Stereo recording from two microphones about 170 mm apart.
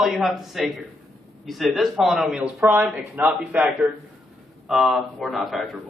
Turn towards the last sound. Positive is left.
turn(degrees=0)  # may be behind; listen again after turning